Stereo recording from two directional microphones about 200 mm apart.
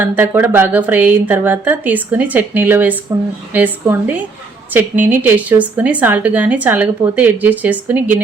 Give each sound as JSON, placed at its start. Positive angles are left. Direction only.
{"t": 0.0, "sound": "a woman's voice", "side_deg": -10}